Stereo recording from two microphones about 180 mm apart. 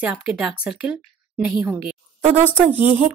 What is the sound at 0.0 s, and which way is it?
Speech, 5° right (ahead or behind).